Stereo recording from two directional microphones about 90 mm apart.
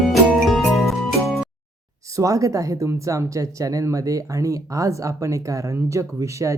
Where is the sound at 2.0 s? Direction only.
40° right (ahead or behind).